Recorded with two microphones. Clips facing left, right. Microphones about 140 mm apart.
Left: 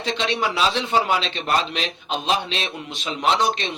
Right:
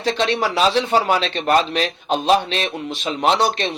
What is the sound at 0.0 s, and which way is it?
A man's voice, 45° right (ahead or behind).